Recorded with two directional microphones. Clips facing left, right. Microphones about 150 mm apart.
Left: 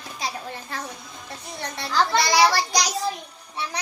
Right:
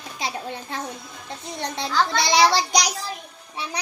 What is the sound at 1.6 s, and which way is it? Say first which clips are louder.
A child's voice: even; 20° right (ahead or behind).